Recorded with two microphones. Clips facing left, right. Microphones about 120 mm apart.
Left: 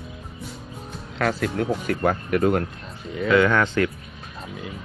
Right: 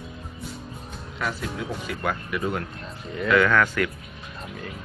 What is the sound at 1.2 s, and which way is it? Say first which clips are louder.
Speech: left 7 dB; 70° left (ahead or behind).